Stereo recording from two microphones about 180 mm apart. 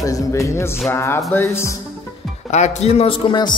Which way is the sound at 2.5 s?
40° left (ahead or behind).